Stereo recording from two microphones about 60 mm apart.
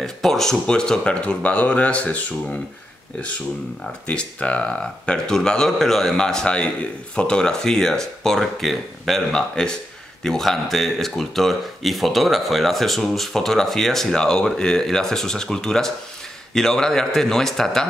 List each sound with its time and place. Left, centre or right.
0.0 s a man's voice: centre; by 2.2 s left
4.1 s a man's voice: centre